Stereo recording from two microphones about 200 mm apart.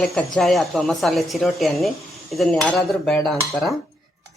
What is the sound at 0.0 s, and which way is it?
Speech, centre (ahead or behind).